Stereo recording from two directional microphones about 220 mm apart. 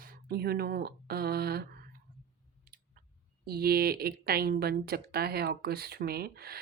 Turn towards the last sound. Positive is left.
turn(degrees=-45)  # may be behind; listen again after turning